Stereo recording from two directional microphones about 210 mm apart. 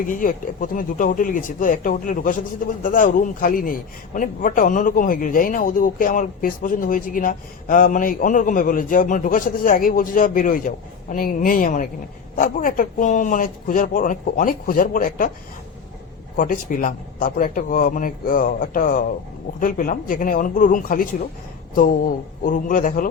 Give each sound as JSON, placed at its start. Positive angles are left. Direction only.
{"t": 0.1, "sound": "speech", "side_deg": 40}
{"t": 16.4, "sound": "speech", "side_deg": 40}